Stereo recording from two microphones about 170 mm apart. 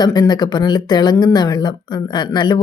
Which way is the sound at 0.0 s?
25° left (ahead or behind).